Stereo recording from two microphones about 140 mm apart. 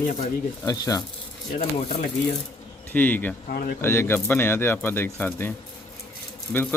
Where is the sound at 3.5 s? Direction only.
90° left.